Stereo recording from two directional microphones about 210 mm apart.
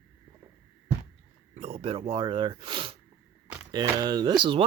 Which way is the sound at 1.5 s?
30° right (ahead or behind).